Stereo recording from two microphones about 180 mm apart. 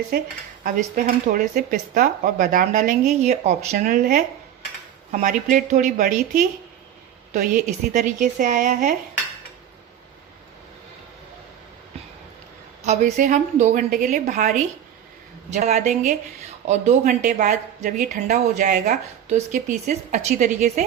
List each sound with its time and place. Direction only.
0.1 s speech: 55° right (ahead or behind)
12.8 s speech: 40° right (ahead or behind)